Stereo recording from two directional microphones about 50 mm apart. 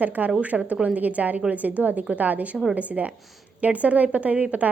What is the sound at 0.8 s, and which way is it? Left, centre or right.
A woman's voice, right.